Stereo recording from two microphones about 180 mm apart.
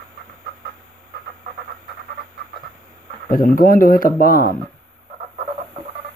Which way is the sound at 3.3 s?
50° left (ahead or behind).